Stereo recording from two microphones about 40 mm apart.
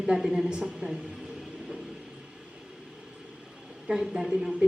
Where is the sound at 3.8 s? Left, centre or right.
Centre.